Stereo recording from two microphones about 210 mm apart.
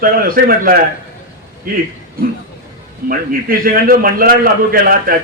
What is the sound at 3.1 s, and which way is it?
A man's voice, 45° right (ahead or behind).